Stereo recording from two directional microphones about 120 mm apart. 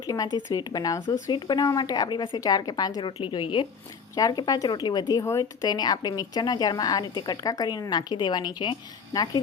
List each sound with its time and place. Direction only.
0.0 s a woman's voice: 30° left (ahead or behind)
5.2 s speech: 25° left (ahead or behind)
5.6 s a woman's voice: 35° left (ahead or behind)